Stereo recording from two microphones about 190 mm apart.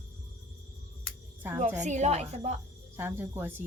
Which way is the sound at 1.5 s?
40° right (ahead or behind).